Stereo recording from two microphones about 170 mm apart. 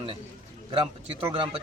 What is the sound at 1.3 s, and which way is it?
Speech, 30° right (ahead or behind).